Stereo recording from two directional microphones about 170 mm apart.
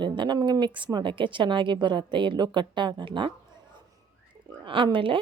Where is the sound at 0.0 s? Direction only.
25° right (ahead or behind).